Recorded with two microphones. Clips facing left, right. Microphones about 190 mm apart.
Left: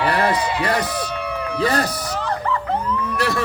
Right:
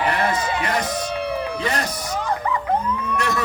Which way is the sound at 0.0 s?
35° left (ahead or behind).